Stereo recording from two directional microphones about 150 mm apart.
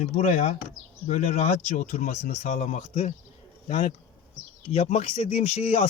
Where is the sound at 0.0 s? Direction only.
50° left (ahead or behind).